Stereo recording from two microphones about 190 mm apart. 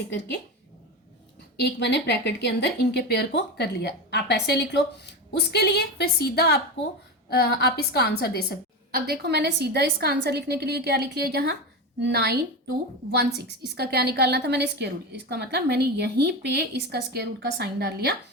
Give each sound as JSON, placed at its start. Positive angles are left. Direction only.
{"t": 1.5, "sound": "speech", "side_deg": 60}
{"t": 8.9, "sound": "a woman's voice", "side_deg": -55}